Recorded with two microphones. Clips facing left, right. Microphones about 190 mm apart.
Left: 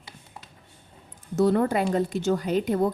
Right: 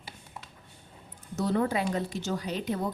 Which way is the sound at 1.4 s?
55° left (ahead or behind).